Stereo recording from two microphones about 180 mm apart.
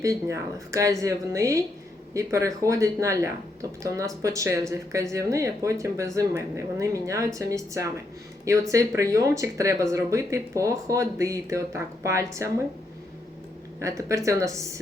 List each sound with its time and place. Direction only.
0.0 s speech: 15° right (ahead or behind)
13.7 s speech: 15° right (ahead or behind)